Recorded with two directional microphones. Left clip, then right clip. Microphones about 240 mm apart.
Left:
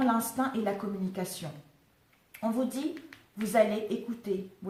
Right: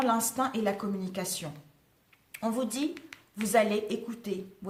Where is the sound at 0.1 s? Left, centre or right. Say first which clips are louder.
Right 1 dB; right.